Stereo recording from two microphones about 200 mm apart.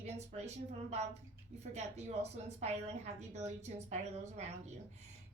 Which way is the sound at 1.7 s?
35° right (ahead or behind).